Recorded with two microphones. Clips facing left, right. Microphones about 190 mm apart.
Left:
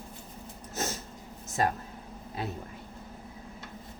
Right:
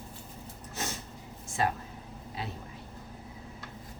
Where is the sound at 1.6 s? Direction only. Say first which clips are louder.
Left 2 dB; 45° left (ahead or behind).